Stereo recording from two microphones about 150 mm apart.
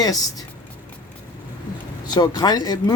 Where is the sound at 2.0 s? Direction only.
25° left (ahead or behind).